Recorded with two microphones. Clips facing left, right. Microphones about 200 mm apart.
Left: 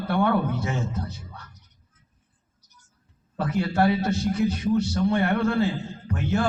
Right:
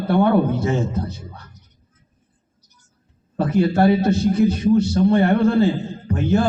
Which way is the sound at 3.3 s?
25° right (ahead or behind).